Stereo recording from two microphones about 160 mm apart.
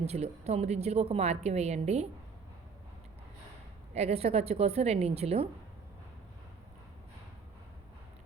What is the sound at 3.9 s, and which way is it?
A woman's voice, 40° right (ahead or behind).